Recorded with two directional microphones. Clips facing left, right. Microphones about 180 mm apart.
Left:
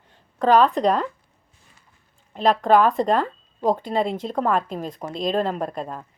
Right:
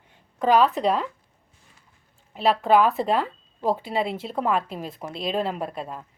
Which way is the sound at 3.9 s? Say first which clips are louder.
Left 3 dB; 45° left (ahead or behind).